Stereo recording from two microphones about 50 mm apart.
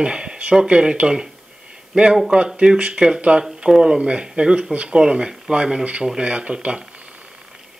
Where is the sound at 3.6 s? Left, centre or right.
Centre.